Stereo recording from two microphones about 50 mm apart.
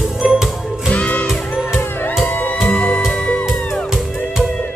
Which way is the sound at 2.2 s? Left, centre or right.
Left.